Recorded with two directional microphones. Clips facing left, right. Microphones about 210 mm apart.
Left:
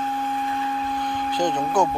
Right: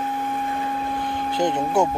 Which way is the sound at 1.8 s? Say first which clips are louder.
Right 1 dB; 25° right (ahead or behind).